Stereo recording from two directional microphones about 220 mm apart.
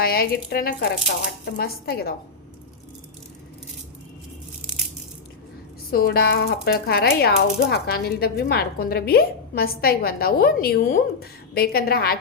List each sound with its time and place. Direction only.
0.0 s speech: 45° left (ahead or behind)
5.9 s speech: 45° left (ahead or behind)